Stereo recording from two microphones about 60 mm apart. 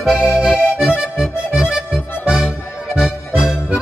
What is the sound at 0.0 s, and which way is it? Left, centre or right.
Accordion, centre.